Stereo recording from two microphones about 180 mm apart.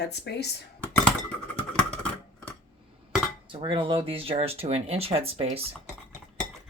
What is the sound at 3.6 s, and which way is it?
Speech, 30° right (ahead or behind).